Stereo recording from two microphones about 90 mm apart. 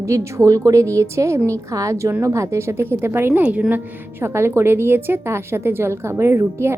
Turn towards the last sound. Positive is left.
turn(degrees=-30)  # may be behind; listen again after turning